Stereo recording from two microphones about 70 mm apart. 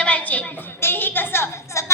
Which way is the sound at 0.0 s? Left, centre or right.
Centre.